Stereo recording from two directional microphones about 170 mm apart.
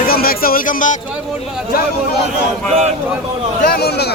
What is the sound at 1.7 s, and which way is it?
Speech, 65° left (ahead or behind).